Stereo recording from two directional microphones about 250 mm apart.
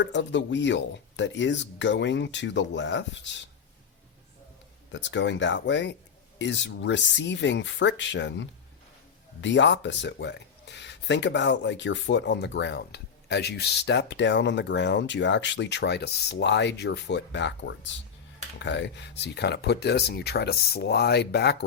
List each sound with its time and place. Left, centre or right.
0.0 s speech: left
4.9 s speech: left